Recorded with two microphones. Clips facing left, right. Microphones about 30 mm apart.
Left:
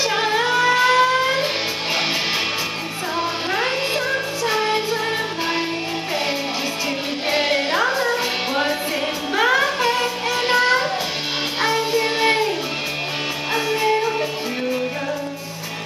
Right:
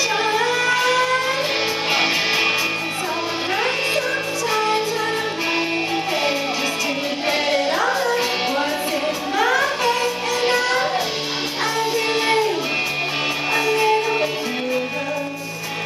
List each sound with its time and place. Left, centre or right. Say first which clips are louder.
0.1 s music: even; centre
2.0 s music: right 2 dB; centre
3.5 s music: right 1 dB; centre
7.2 s music: even; centre
9.8 s music: even; centre
11.6 s music: left 1 dB; centre
13.5 s music: right 1 dB; centre